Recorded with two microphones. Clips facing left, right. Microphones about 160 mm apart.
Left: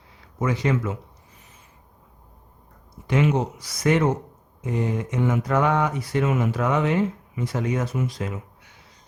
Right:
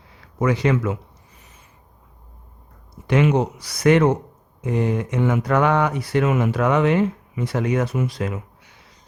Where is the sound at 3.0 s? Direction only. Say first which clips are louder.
Right 3 dB; 70° right (ahead or behind).